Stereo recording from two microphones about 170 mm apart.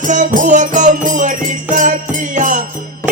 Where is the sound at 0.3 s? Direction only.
45° right (ahead or behind).